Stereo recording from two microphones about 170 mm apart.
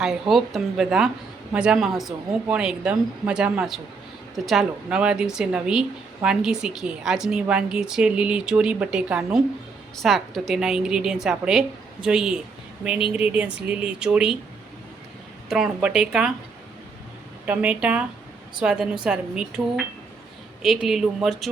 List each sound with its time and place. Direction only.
0.0 s a woman's voice: centre (ahead or behind)
15.4 s a woman's voice: 5° right (ahead or behind)
17.4 s a woman's voice: 10° right (ahead or behind)